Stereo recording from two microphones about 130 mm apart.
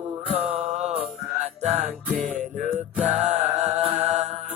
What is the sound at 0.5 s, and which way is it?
Music, 60° right (ahead or behind).